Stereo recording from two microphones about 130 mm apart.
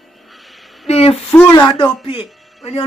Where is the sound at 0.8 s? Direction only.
50° left (ahead or behind).